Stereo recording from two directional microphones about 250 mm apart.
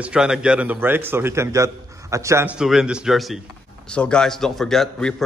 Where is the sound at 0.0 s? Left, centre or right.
Centre.